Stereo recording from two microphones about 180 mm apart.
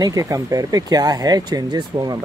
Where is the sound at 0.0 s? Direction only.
20° right (ahead or behind).